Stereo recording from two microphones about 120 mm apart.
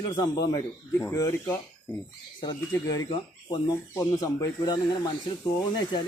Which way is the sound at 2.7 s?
30° left (ahead or behind).